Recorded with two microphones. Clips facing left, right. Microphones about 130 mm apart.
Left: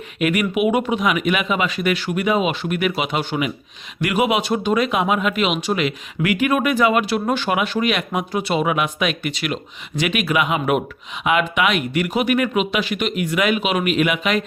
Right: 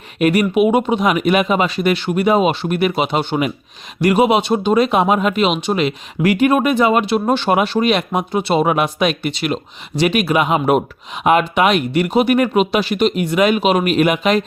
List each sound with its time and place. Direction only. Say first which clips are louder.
0.2 s speech: right 5 dB; 35° right (ahead or behind)
8.6 s speech: right 4 dB; 40° right (ahead or behind)